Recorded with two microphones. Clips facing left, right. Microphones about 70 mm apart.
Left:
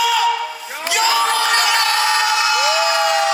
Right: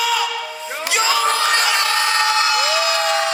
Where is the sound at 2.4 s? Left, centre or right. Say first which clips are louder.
Left 1 dB; right.